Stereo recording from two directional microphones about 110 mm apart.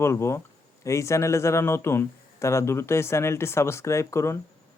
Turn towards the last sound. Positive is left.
turn(degrees=25)  # may be behind; listen again after turning